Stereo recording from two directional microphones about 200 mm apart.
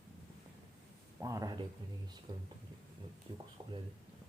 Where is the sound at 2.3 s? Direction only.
20° right (ahead or behind).